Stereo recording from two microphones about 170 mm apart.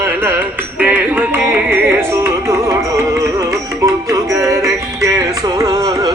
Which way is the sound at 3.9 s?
20° right (ahead or behind).